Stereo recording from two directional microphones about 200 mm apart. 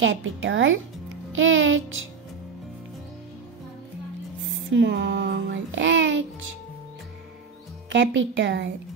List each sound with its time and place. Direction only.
0.0 s speech: 75° right (ahead or behind)
4.5 s music: 65° right (ahead or behind)
7.9 s speech: 65° right (ahead or behind)